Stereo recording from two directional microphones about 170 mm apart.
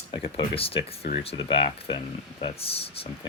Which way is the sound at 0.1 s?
30° left (ahead or behind).